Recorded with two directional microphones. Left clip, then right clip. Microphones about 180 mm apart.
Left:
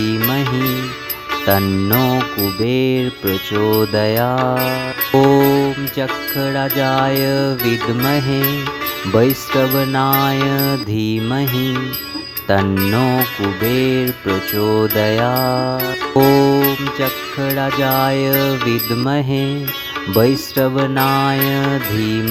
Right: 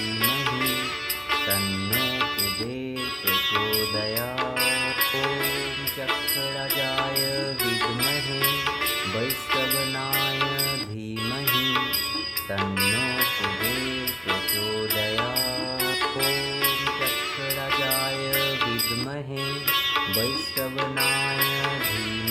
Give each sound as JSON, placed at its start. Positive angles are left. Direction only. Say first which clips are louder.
{"t": 0.0, "sound": "music", "louder": "left 6 dB", "side_deg": 40}
{"t": 3.2, "sound": "music", "louder": "left 5 dB", "side_deg": 25}
{"t": 11.5, "sound": "music", "louder": "left 2 dB", "side_deg": 25}
{"t": 12.5, "sound": "music", "louder": "left 10 dB", "side_deg": 35}
{"t": 20.1, "sound": "music", "louder": "left 12 dB", "side_deg": 35}